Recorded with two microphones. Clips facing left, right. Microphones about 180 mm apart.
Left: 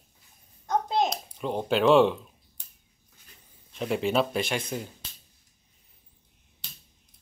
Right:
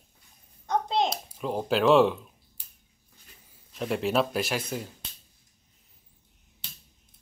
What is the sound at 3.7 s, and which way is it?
Speech, centre (ahead or behind).